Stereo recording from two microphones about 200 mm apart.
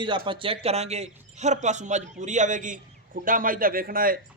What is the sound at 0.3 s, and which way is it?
A man's voice, 25° right (ahead or behind).